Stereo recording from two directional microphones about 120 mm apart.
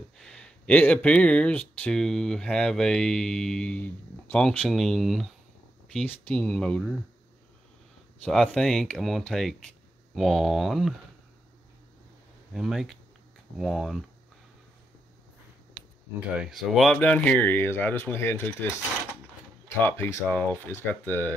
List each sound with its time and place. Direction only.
0.2 s speech: 5° left (ahead or behind)
6.0 s speech: 10° left (ahead or behind)
8.3 s speech: 5° left (ahead or behind)
12.5 s speech: centre (ahead or behind)
16.3 s speech: centre (ahead or behind); by 18.7 s 15° left (ahead or behind)
19.8 s speech: 20° left (ahead or behind)